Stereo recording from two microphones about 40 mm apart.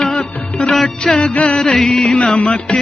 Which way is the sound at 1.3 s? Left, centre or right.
Left.